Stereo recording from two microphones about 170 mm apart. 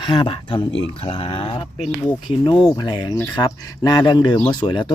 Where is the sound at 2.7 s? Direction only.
25° left (ahead or behind).